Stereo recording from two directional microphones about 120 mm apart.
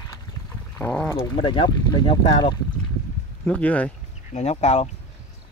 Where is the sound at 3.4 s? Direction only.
10° left (ahead or behind).